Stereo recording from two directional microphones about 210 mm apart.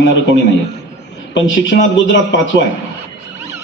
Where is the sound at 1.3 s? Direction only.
60° left (ahead or behind).